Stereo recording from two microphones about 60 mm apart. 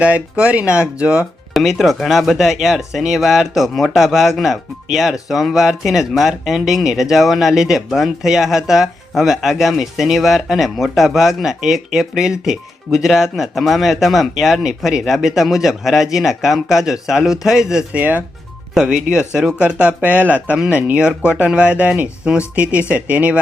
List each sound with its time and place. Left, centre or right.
0.0 s speech: right
1.5 s speech: centre
17.9 s speech: right
18.7 s speech: centre